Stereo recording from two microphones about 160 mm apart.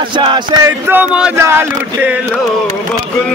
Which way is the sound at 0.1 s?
30° right (ahead or behind).